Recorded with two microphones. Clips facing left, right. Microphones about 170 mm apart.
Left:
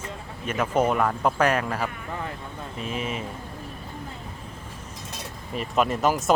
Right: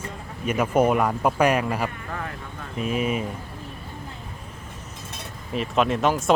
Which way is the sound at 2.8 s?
30° left (ahead or behind).